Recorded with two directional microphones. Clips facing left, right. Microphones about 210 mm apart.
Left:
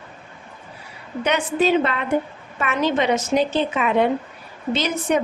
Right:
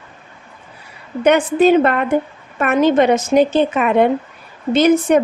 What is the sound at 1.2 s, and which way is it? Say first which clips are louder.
A woman's voice: right 8 dB; 50° right (ahead or behind).